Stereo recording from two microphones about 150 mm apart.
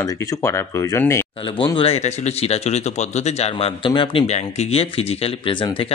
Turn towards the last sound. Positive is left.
turn(degrees=35)  # may be behind; listen again after turning